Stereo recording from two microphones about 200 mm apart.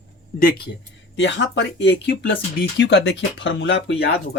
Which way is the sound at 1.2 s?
65° left (ahead or behind).